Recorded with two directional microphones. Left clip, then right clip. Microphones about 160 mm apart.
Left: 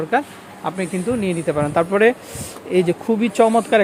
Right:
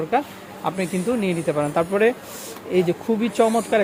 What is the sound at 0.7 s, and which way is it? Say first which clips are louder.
Speech: left 1 dB; 10° left (ahead or behind).